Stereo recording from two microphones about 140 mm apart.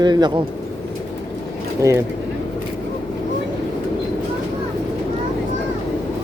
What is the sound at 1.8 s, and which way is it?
Speech, 20° right (ahead or behind).